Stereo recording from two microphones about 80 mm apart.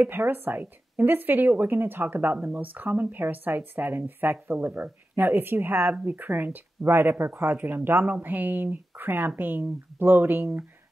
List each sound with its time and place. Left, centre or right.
0.0 s speech: right